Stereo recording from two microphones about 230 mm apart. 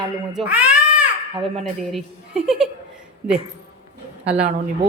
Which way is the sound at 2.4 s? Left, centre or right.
Centre.